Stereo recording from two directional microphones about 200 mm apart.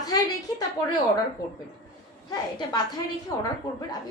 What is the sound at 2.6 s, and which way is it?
Speech, 20° left (ahead or behind).